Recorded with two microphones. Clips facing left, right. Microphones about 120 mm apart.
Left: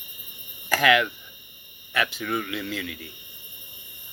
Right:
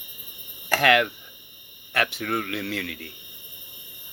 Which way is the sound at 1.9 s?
65° right (ahead or behind).